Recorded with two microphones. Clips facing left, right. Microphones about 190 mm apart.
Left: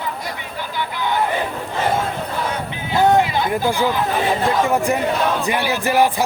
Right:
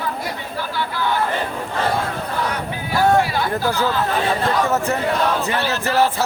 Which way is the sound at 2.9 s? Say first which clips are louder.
Left 2 dB; 20° left (ahead or behind).